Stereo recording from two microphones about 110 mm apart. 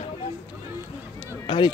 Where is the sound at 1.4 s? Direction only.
50° left (ahead or behind).